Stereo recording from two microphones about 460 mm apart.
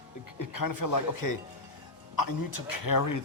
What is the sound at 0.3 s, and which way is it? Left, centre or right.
Speech, left.